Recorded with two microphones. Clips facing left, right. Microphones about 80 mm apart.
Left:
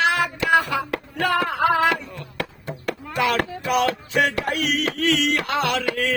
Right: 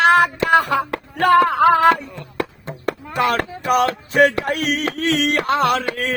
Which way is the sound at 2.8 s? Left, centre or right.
Right.